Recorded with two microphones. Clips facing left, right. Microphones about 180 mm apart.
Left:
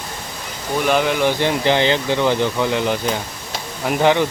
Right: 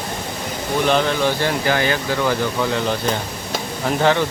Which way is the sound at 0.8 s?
10° left (ahead or behind).